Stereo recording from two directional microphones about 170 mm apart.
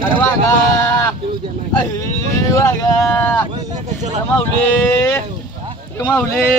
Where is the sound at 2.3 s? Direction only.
20° left (ahead or behind).